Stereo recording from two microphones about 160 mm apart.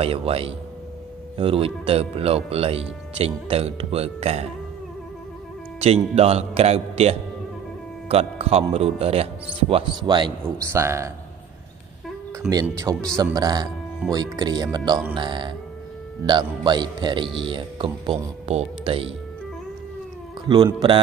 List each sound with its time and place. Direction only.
0.0 s speech: 35° right (ahead or behind)
5.8 s speech: 40° right (ahead or behind)
10.7 s a man's voice: 15° right (ahead or behind)
12.4 s speech: 25° right (ahead or behind)
20.4 s speech: 30° right (ahead or behind)